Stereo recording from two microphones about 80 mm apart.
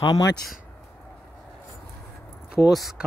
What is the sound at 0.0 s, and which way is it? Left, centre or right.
Speech, left.